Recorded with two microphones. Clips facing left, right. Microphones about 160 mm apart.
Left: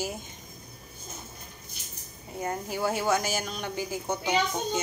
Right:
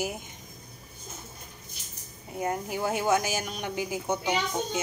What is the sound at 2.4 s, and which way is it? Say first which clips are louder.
A woman's voice: right 1 dB; 15° right (ahead or behind).